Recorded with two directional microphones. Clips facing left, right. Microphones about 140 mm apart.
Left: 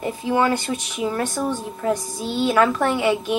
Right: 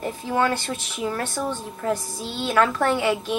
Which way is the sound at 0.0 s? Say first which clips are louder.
Left 3 dB; 5° left (ahead or behind).